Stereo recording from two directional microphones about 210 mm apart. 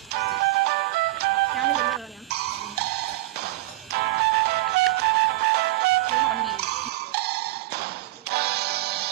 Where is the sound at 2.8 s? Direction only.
50° right (ahead or behind).